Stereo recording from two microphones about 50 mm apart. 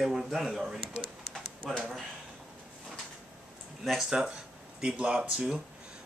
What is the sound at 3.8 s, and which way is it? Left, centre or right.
Speech, centre.